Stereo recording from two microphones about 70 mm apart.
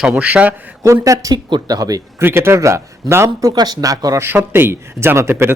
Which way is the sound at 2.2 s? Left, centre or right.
Right.